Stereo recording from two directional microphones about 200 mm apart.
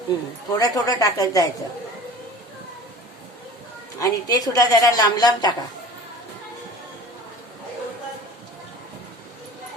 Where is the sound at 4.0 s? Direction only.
20° left (ahead or behind).